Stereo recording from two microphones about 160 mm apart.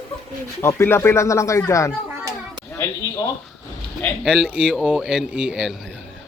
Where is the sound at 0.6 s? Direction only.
15° left (ahead or behind).